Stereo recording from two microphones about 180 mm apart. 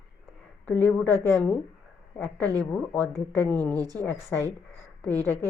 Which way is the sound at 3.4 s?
10° left (ahead or behind).